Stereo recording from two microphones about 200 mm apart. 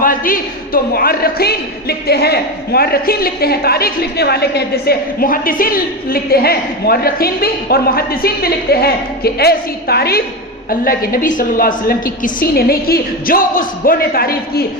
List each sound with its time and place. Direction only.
0.0 s a man's voice: 45° left (ahead or behind)